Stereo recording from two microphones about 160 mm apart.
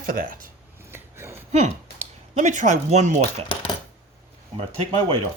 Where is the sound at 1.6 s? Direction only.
45° right (ahead or behind).